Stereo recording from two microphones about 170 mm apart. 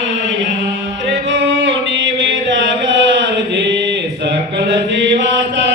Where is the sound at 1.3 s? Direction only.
90° right.